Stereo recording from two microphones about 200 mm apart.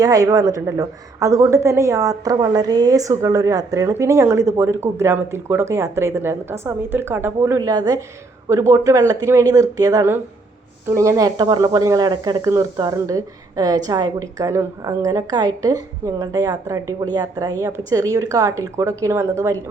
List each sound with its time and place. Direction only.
0.0 s speech: 15° right (ahead or behind)